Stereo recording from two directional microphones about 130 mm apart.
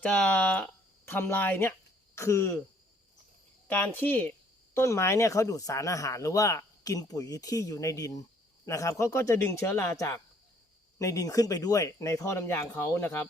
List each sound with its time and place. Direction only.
0.0 s speech: 10° left (ahead or behind)
3.7 s speech: 15° left (ahead or behind)